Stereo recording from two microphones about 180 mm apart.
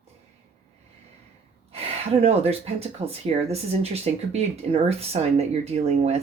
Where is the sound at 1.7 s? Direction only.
35° right (ahead or behind).